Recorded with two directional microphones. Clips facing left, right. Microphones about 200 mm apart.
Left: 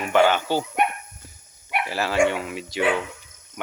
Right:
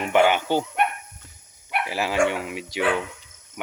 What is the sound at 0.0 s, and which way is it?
Speech, 15° right (ahead or behind).